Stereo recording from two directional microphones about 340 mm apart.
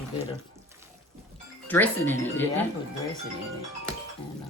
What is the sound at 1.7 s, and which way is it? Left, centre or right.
Speech, centre.